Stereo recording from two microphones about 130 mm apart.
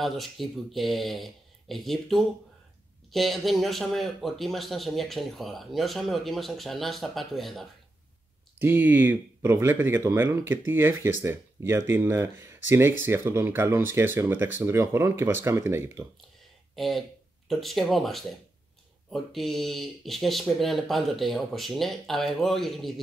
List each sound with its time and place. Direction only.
0.0 s speech: centre (ahead or behind)
8.5 s speech: 15° right (ahead or behind)
16.7 s speech: centre (ahead or behind)